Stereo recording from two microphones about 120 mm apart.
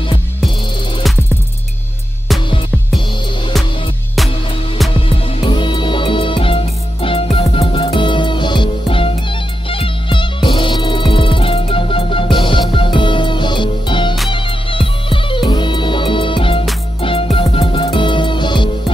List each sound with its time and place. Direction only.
5.1 s music: 50° left (ahead or behind)